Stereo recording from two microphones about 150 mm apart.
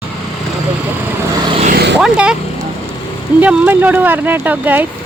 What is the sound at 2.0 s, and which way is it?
Vehicle, 5° right (ahead or behind).